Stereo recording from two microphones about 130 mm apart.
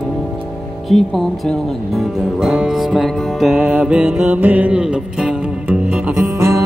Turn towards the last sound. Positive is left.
turn(degrees=-20)  # may be behind; listen again after turning